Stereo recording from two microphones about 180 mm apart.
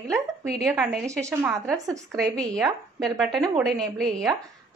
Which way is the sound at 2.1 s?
5° left (ahead or behind).